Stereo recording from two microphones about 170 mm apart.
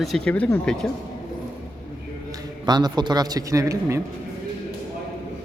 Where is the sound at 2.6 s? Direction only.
25° right (ahead or behind).